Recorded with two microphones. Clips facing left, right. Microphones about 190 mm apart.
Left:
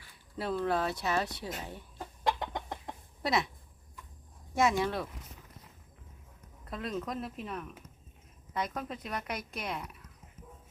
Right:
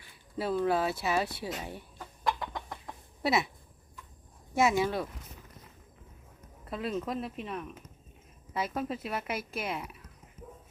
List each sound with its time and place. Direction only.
0.3 s speech: 5° right (ahead or behind)
2.2 s chicken: 20° left (ahead or behind)
3.2 s speech: 5° right (ahead or behind)
4.5 s speech: 5° right (ahead or behind)
6.7 s speech: 5° right (ahead or behind)